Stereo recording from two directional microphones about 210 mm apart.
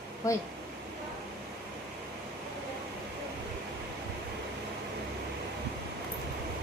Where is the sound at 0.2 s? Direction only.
15° left (ahead or behind).